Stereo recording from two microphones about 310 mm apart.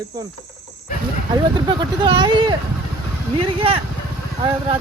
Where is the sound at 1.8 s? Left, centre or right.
Centre.